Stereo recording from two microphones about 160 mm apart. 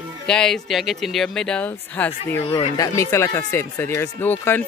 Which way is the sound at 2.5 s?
25° left (ahead or behind).